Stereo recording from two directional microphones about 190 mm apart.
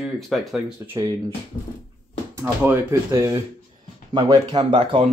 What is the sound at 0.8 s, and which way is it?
Speech, 15° right (ahead or behind).